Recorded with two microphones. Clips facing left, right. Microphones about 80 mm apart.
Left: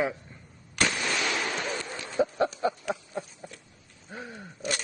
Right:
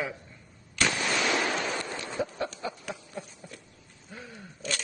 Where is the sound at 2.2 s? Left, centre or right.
Left.